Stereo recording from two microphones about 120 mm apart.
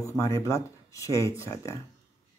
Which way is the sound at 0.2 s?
25° left (ahead or behind).